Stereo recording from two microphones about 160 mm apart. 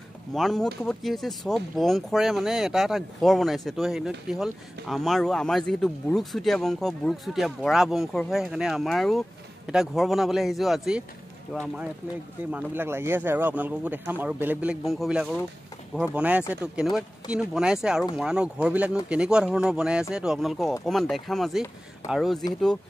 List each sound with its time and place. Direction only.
0.3 s speech: centre (ahead or behind)